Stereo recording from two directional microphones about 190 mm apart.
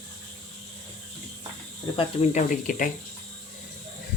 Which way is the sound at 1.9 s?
35° left (ahead or behind).